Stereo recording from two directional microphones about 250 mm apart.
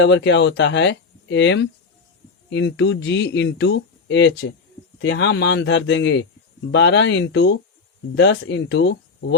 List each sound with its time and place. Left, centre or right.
0.0 s speech: left